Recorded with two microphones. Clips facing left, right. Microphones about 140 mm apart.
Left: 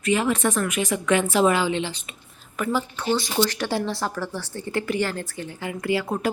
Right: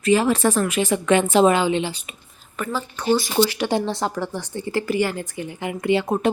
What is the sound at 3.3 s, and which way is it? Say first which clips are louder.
Speech: right 4 dB; 10° right (ahead or behind).